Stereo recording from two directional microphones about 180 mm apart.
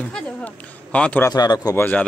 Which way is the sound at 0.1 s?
5° left (ahead or behind).